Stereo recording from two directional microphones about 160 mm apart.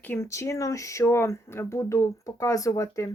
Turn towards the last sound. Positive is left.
turn(degrees=20)  # may be behind; listen again after turning